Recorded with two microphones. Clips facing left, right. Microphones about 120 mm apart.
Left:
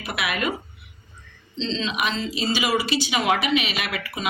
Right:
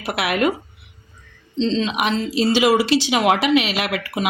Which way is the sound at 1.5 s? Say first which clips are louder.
Right 7 dB; 55° right (ahead or behind).